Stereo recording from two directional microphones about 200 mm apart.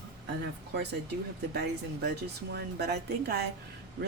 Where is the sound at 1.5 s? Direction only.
55° right (ahead or behind).